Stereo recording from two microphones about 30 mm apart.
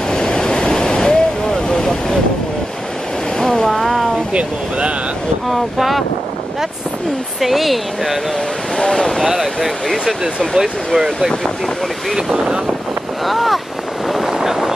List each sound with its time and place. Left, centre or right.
0.1 s waves: left
3.3 s waves: left
3.6 s a sound: centre
4.3 s speech: right
5.5 s a woman's voice: centre
7.3 s a woman's voice: centre
8.9 s speech: centre
9.2 s speech: centre
11.0 s speech: centre
12.3 s speech: right
13.2 s a woman's voice: centre
14.1 s a sound: centre